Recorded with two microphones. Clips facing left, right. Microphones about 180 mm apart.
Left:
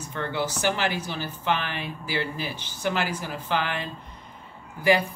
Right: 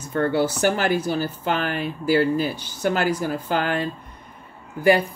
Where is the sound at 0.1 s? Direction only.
45° right (ahead or behind).